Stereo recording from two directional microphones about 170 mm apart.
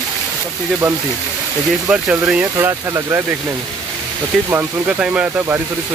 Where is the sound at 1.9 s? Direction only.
5° right (ahead or behind).